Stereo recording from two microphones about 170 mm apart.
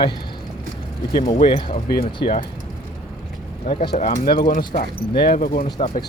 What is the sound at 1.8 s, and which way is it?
Speech, 65° left (ahead or behind).